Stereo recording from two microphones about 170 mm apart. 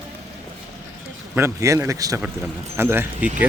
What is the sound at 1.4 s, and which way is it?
Speech, 15° right (ahead or behind).